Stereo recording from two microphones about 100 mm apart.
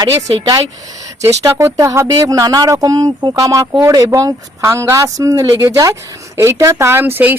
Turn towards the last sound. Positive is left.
turn(degrees=-20)  # may be behind; listen again after turning